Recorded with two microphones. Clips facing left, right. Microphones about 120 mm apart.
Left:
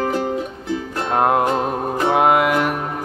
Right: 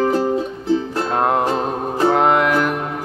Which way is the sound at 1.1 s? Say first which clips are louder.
Left 2 dB; 5° left (ahead or behind).